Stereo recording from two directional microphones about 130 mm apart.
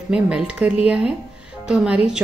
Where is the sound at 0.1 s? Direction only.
5° right (ahead or behind).